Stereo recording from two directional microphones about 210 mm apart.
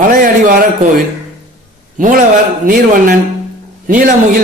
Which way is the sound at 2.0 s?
40° right (ahead or behind).